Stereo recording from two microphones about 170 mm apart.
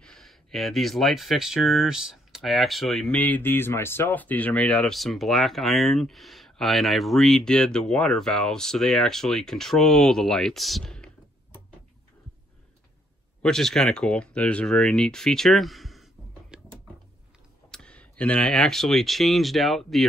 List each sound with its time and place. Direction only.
0.0 s speech: centre (ahead or behind)
13.4 s speech: 5° left (ahead or behind)
17.6 s speech: 5° left (ahead or behind)